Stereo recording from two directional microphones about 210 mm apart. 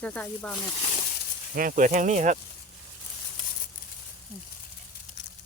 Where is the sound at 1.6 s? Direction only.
40° right (ahead or behind).